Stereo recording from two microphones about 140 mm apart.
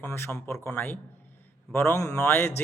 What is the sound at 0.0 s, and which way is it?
Speech, 15° left (ahead or behind).